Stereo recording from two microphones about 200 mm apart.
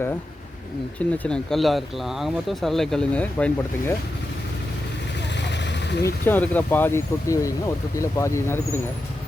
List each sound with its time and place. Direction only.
0.9 s speech: 5° left (ahead or behind)
5.4 s vehicle: 60° left (ahead or behind)
6.2 s speech: 10° left (ahead or behind)